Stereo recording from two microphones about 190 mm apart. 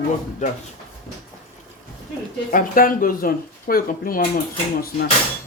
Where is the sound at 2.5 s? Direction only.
45° left (ahead or behind).